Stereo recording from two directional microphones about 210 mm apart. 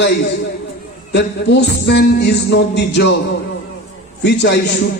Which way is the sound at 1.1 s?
55° left (ahead or behind).